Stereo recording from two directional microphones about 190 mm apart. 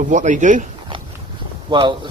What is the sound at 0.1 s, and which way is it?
Speech, 40° right (ahead or behind).